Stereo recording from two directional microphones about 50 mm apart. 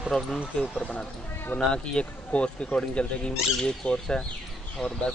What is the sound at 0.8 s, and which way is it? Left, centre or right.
Speech, left.